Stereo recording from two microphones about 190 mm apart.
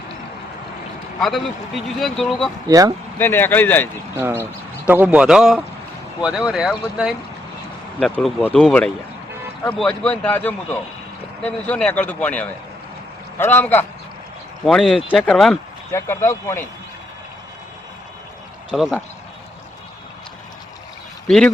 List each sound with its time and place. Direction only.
1.2 s speech: centre (ahead or behind)
2.6 s speech: 20° right (ahead or behind)
3.2 s speech: 10° left (ahead or behind)
4.2 s speech: 15° right (ahead or behind)
15.9 s speech: 15° left (ahead or behind)
18.7 s speech: 5° left (ahead or behind)
21.2 s speech: 5° left (ahead or behind)